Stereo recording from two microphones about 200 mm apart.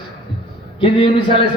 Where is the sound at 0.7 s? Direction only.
25° left (ahead or behind).